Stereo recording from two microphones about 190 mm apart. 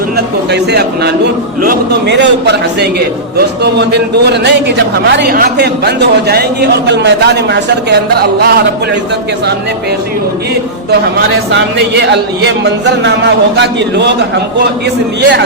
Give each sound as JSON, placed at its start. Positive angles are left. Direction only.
{"t": 0.5, "sound": "a man's voice", "side_deg": -60}
{"t": 11.5, "sound": "a man's voice", "side_deg": -65}